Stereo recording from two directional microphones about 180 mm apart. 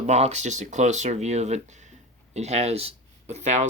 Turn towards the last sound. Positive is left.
turn(degrees=-40)  # may be behind; listen again after turning